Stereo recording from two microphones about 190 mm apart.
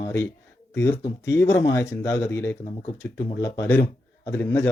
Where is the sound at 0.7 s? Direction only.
15° left (ahead or behind).